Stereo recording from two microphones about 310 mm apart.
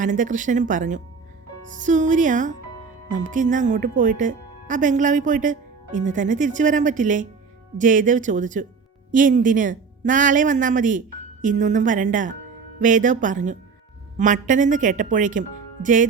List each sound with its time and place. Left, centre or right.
0.0 s speech: right